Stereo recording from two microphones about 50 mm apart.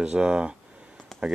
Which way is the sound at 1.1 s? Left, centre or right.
Centre.